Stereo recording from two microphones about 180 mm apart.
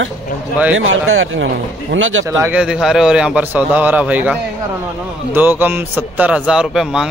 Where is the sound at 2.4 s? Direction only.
5° right (ahead or behind).